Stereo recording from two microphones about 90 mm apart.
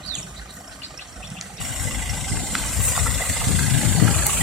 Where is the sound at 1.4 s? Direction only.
Centre (ahead or behind).